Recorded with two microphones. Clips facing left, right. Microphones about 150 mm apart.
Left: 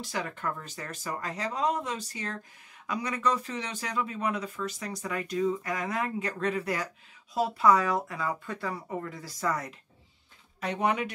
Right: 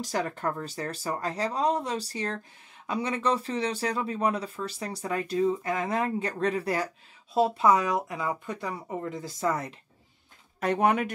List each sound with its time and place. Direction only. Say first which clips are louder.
0.0 s speech: right 4 dB; 40° right (ahead or behind)
10.6 s speech: right 4 dB; 50° right (ahead or behind)